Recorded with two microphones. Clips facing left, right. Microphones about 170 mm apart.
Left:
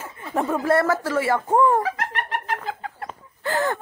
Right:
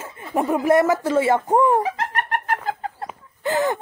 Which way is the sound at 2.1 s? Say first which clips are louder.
Right 3 dB; 50° right (ahead or behind).